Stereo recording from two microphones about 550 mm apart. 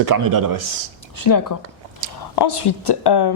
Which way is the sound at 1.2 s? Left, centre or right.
Left.